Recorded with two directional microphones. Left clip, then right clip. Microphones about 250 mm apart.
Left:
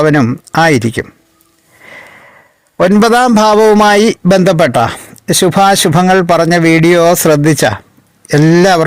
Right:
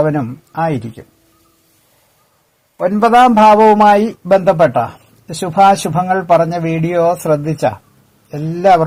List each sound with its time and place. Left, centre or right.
0.0 s speech: left
2.7 s a man's voice: left
3.7 s a man's voice: left